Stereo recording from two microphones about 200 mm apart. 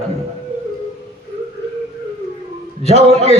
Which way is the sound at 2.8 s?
30° left (ahead or behind).